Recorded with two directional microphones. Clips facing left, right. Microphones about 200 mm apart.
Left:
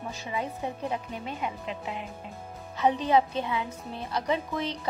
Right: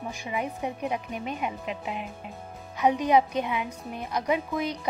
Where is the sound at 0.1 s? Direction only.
15° right (ahead or behind).